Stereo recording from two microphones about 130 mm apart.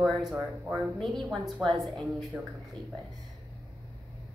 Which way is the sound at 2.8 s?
35° right (ahead or behind).